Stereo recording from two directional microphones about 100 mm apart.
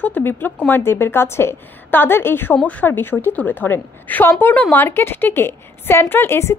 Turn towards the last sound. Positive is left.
turn(degrees=25)  # may be behind; listen again after turning